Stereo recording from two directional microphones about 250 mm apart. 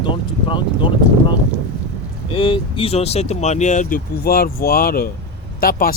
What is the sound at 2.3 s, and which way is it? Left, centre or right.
Speech, left.